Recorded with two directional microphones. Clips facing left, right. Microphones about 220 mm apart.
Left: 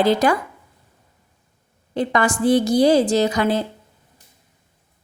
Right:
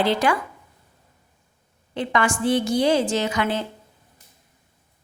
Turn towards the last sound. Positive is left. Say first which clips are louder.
# left 5 dB
turn(degrees=35)  # may be behind; listen again after turning